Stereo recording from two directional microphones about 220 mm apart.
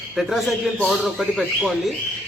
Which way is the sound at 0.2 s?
Centre (ahead or behind).